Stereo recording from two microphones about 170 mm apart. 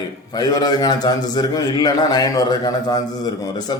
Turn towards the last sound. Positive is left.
turn(degrees=25)  # may be behind; listen again after turning